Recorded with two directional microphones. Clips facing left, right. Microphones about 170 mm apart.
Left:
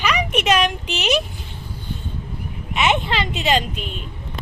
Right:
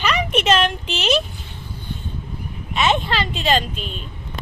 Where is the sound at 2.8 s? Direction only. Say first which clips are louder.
Even; 20° left (ahead or behind).